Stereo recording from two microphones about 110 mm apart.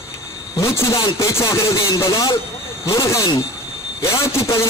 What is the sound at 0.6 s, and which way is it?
A woman's voice, 30° left (ahead or behind).